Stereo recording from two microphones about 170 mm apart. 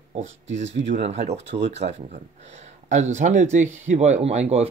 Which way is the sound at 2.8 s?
45° right (ahead or behind).